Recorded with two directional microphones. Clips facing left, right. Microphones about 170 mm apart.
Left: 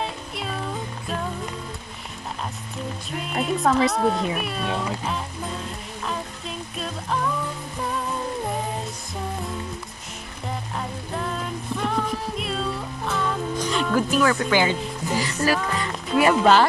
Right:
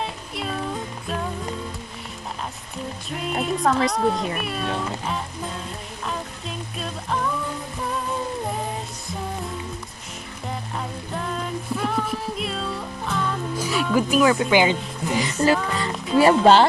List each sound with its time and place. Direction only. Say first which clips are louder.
3.3 s speech: left 1 dB; centre (ahead or behind)
11.7 s music: even; centre (ahead or behind); by 15.6 s 20° right (ahead or behind)
16.2 s speech: right 3 dB; 30° right (ahead or behind)